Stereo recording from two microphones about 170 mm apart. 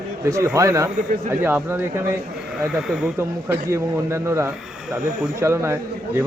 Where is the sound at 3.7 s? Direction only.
15° right (ahead or behind).